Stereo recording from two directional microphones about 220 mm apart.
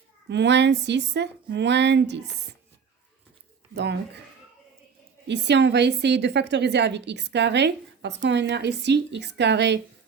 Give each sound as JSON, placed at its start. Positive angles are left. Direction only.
{"t": 0.3, "sound": "a woman's voice", "side_deg": -50}
{"t": 3.8, "sound": "a woman's voice", "side_deg": -50}
{"t": 5.3, "sound": "a woman's voice", "side_deg": -50}